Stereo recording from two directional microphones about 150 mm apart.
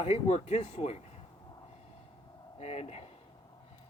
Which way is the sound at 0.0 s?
45° left (ahead or behind).